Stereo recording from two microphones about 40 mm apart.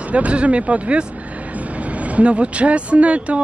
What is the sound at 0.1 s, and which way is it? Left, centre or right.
Speech, right.